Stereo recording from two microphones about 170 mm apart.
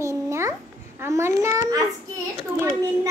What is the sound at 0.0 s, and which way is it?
Babbling, 15° right (ahead or behind).